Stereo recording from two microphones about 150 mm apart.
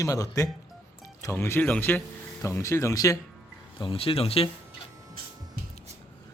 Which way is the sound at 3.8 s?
35° left (ahead or behind).